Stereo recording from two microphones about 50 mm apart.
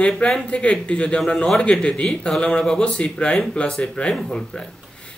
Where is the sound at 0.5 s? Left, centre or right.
Left.